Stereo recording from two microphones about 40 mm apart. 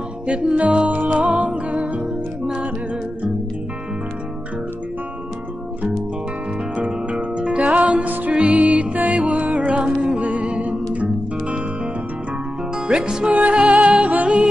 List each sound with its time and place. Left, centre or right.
0.3 s music: right
6.8 s music: right
12.7 s speech: centre
13.4 s music: right